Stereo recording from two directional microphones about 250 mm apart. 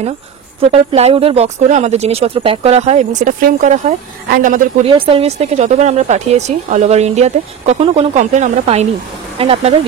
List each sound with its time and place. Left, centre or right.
0.6 s speech: right
4.9 s speech: right